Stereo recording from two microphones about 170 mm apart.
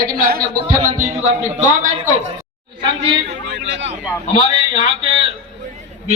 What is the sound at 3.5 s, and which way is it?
Speech, 90° right.